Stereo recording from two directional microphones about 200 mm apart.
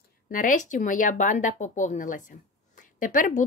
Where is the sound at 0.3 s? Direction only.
40° left (ahead or behind).